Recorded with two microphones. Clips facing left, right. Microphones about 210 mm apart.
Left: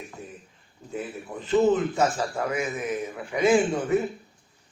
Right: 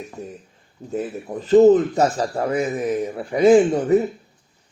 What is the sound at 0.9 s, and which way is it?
A man's voice, 40° right (ahead or behind).